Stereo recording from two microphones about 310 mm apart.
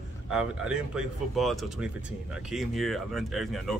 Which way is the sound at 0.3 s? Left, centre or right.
Centre.